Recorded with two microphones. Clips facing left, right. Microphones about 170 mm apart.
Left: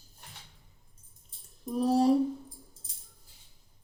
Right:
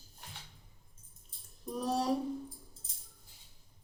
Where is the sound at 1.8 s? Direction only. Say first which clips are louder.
Left 8 dB; 25° left (ahead or behind).